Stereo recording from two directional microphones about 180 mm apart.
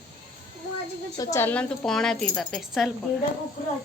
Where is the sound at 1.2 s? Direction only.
15° left (ahead or behind); by 2.9 s centre (ahead or behind).